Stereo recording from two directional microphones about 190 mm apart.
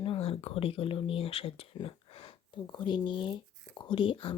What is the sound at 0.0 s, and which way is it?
Speech, 30° left (ahead or behind).